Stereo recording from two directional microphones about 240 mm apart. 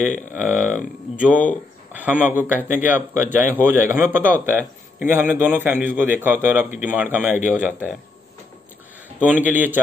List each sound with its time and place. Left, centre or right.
0.2 s speech: centre
1.9 s speech: centre
9.2 s speech: centre